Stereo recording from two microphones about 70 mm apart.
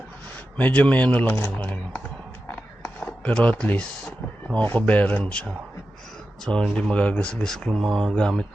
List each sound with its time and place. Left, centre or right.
0.3 s speech: left
3.0 s wild animals: centre
4.6 s speech: left